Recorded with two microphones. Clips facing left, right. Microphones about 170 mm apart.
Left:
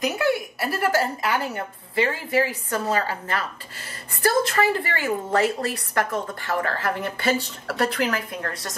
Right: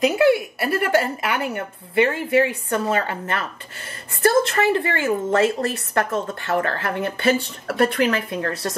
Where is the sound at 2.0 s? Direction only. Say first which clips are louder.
Right 4 dB; 25° right (ahead or behind).